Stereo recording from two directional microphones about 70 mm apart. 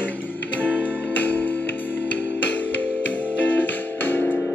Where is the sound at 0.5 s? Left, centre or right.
Right.